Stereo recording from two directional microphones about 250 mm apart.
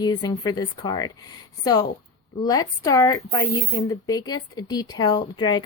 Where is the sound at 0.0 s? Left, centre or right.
Centre.